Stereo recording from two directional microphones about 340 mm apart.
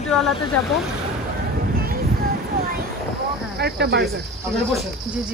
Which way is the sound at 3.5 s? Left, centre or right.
Right.